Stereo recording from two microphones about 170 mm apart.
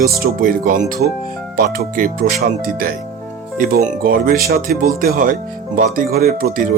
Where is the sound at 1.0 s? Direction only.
70° right (ahead or behind).